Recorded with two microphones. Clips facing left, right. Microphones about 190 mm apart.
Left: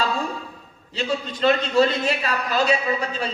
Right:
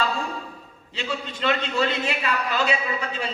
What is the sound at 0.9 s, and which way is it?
A man's voice, 40° left (ahead or behind).